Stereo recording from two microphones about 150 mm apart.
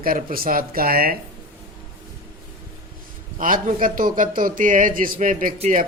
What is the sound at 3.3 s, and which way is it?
Speech, 60° right (ahead or behind).